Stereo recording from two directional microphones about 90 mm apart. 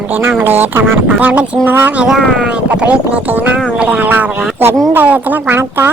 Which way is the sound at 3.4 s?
15° right (ahead or behind).